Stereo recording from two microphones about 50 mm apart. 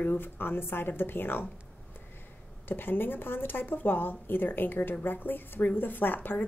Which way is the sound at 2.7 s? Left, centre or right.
Left.